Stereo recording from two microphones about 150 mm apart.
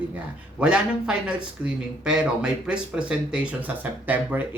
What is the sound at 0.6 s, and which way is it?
Speech, 5° right (ahead or behind).